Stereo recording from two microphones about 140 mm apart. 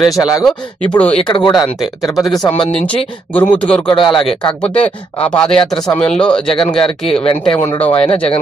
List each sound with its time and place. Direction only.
0.5 s speech: 10° left (ahead or behind)
1.1 s speech: 30° left (ahead or behind)
3.3 s speech: 10° left (ahead or behind)
3.8 s speech: 35° left (ahead or behind)
4.7 s speech: 10° left (ahead or behind)